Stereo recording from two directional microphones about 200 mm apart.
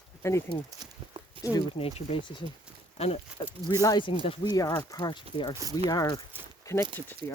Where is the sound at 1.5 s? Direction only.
30° left (ahead or behind).